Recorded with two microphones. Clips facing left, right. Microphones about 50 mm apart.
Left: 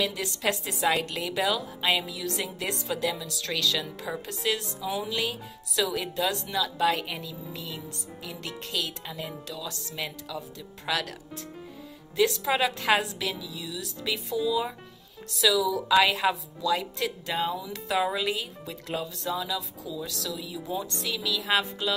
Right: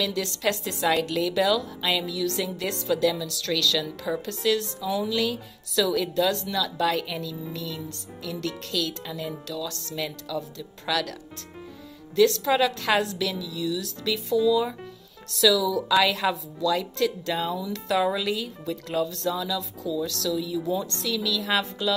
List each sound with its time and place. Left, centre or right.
0.0 s speech: centre
12.2 s speech: centre